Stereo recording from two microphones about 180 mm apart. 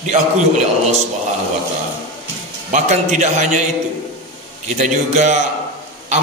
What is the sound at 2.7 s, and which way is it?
Speech, 40° right (ahead or behind).